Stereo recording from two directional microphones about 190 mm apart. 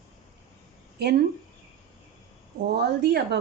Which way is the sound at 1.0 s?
60° right (ahead or behind).